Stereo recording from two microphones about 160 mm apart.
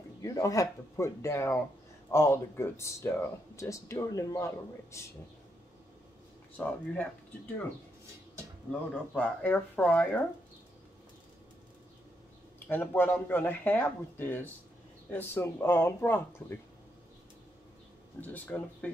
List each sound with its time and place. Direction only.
0.2 s speech: 20° left (ahead or behind)
6.5 s speech: 10° left (ahead or behind)
9.1 s speech: 10° left (ahead or behind)
12.6 s speech: 10° left (ahead or behind)
18.2 s speech: 10° left (ahead or behind)